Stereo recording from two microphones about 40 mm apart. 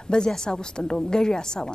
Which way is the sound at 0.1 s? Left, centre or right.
Centre.